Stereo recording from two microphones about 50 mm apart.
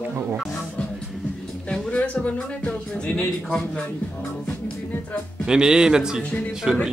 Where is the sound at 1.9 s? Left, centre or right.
Left.